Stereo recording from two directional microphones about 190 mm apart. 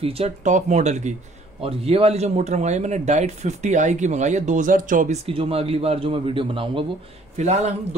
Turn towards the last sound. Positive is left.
turn(degrees=-35)  # may be behind; listen again after turning